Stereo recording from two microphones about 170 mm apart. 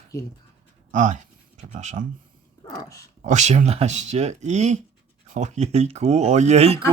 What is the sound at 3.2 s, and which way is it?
Speech, 45° right (ahead or behind).